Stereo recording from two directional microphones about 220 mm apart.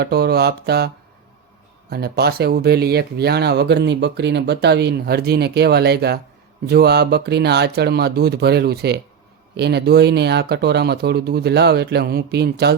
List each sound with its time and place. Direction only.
0.0 s speech: 45° right (ahead or behind)
1.9 s speech: 45° right (ahead or behind)